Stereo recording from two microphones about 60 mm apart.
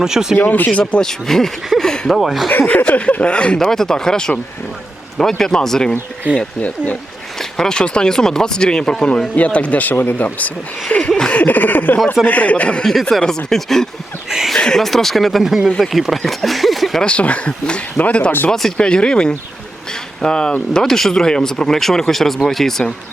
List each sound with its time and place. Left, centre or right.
0.0 s speech: centre
0.3 s speech: left
1.0 s speech: centre
2.5 s speech: left
3.6 s speech: centre
6.3 s speech: right
6.6 s speech: left
7.5 s speech: centre; by 10.5 s left
10.9 s a sound: left
12.2 s speech: left
12.8 s speech: centre
14.3 s a sound: centre
14.5 s speech: centre
17.0 s speech: centre